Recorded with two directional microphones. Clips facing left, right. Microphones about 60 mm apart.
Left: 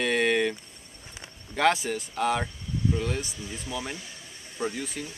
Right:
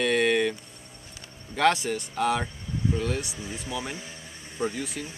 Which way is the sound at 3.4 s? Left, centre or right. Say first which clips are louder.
Right 1 dB; centre.